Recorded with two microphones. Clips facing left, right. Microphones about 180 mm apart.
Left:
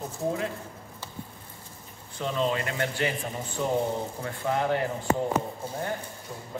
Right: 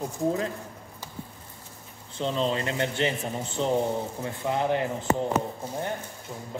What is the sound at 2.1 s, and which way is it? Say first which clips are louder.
A man's voice: right 1 dB; 25° right (ahead or behind).